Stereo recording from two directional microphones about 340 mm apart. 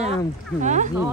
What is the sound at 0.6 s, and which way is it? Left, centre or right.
Speech, right.